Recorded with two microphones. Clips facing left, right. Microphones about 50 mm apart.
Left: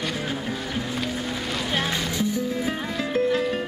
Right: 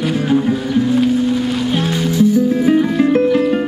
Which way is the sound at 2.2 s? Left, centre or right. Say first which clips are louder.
Right 16 dB; right.